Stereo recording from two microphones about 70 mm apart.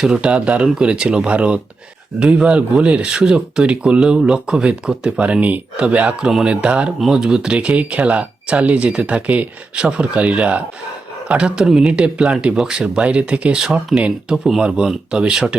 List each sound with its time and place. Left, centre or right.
0.0 s speech: centre